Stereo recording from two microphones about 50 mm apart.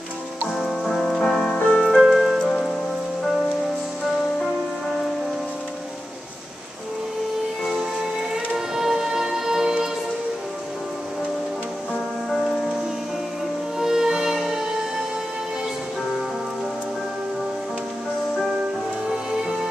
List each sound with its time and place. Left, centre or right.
0.5 s music: centre
1.6 s music: left
2.0 s music: centre
7.7 s music: centre
11.9 s music: centre
13.7 s music: centre
19.0 s music: centre